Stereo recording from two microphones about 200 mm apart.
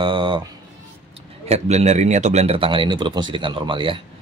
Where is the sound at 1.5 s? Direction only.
35° right (ahead or behind).